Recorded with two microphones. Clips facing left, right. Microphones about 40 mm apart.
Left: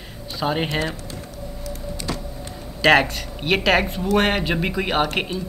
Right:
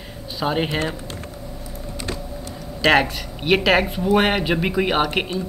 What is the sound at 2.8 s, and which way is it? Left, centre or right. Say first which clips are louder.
Speech: left 1 dB; centre.